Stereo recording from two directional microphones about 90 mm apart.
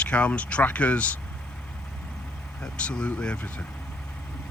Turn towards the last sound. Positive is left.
turn(degrees=10)  # may be behind; listen again after turning